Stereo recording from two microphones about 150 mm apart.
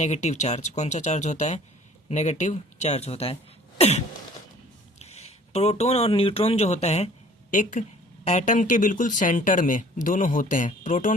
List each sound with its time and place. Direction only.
0.0 s speech: 50° left (ahead or behind)
3.8 s throat clearing: 45° left (ahead or behind)
4.9 s speech: 45° left (ahead or behind)
7.5 s speech: 60° left (ahead or behind)